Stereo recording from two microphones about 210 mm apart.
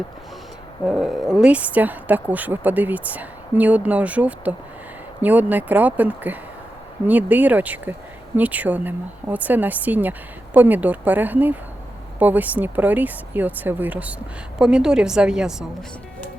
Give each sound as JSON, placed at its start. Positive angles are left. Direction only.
{"t": 0.9, "sound": "a woman's voice", "side_deg": 0}